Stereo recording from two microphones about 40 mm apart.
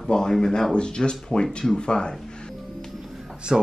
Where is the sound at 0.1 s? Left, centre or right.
Centre.